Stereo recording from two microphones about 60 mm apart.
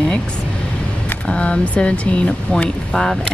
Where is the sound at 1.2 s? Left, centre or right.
Centre.